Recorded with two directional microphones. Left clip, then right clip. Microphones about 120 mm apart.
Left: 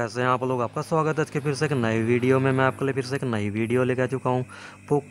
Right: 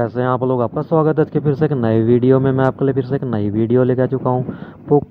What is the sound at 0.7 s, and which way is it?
Speech, 40° right (ahead or behind).